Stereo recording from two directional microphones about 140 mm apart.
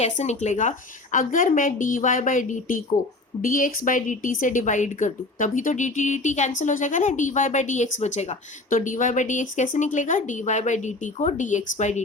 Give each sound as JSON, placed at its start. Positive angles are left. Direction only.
{"t": 0.0, "sound": "a woman's voice", "side_deg": 55}
{"t": 1.1, "sound": "a woman's voice", "side_deg": 70}